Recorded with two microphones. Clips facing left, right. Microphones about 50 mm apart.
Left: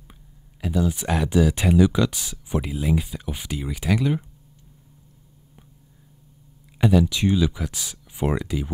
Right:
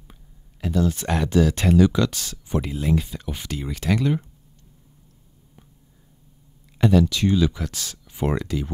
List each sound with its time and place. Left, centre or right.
0.1 s speech: centre
6.8 s speech: centre